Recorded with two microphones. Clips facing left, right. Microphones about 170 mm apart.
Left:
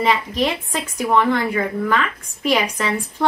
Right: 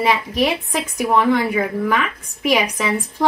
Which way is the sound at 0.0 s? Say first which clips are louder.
Right 1 dB; 10° right (ahead or behind).